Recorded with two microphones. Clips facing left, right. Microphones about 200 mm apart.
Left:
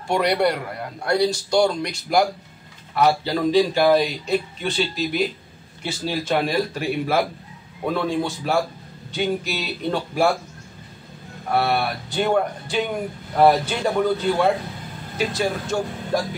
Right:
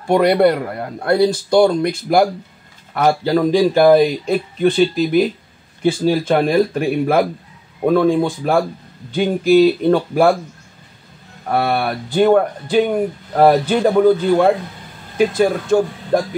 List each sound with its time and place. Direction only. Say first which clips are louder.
0.1 s speech: right 7 dB; 55° right (ahead or behind)
11.5 s speech: right 3 dB; 50° right (ahead or behind)